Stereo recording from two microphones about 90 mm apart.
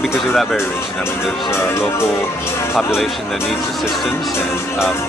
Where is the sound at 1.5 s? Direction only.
30° left (ahead or behind).